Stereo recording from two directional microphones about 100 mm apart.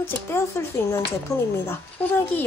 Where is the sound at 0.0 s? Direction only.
25° left (ahead or behind).